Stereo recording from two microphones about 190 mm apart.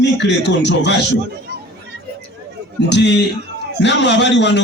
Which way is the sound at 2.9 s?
65° left (ahead or behind).